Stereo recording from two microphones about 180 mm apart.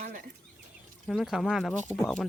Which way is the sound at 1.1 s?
Centre (ahead or behind).